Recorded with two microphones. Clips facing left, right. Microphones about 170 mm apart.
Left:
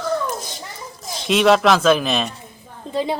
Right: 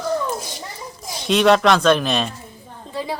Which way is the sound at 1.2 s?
Centre (ahead or behind).